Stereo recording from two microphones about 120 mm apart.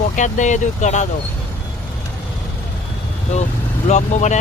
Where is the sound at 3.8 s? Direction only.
75° left (ahead or behind).